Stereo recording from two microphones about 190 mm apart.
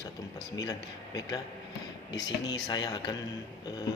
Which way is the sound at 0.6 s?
20° left (ahead or behind).